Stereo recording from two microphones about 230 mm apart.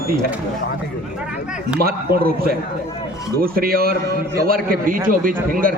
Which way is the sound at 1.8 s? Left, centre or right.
Right.